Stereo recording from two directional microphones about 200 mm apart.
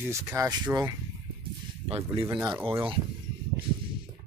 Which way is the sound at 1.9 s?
30° right (ahead or behind).